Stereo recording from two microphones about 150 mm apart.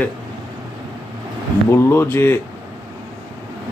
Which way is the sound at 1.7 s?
15° left (ahead or behind).